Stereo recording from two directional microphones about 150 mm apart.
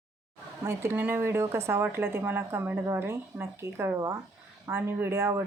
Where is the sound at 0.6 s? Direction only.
15° right (ahead or behind).